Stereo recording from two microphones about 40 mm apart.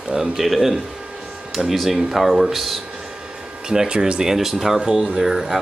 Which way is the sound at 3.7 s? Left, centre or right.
Centre.